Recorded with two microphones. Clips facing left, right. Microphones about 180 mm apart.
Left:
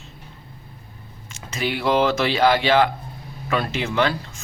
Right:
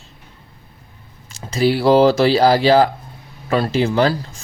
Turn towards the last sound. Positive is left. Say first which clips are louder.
# right 5 dB
turn(degrees=-35)  # may be behind; listen again after turning